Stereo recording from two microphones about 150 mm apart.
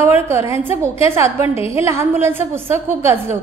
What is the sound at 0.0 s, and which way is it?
A woman's voice, 15° right (ahead or behind).